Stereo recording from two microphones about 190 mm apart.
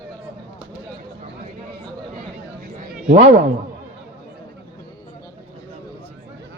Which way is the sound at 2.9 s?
40° right (ahead or behind).